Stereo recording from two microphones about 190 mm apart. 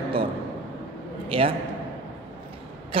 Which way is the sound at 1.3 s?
30° right (ahead or behind).